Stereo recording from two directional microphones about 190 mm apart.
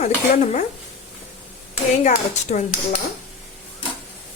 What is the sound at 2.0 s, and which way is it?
Speech, 40° left (ahead or behind).